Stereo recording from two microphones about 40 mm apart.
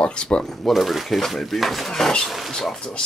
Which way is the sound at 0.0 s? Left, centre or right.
Left.